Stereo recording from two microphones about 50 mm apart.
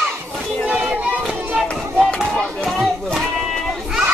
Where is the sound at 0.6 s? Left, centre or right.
Centre.